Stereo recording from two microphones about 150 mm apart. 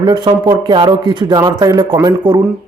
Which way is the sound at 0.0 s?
30° right (ahead or behind).